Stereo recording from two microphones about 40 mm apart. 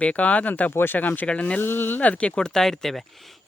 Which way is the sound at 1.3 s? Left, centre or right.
Left.